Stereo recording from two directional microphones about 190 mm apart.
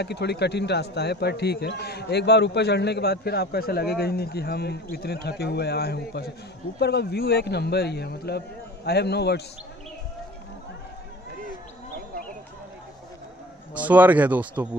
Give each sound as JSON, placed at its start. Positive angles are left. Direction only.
{"t": 0.0, "sound": "a man's voice", "side_deg": 60}
{"t": 13.7, "sound": "speech", "side_deg": -10}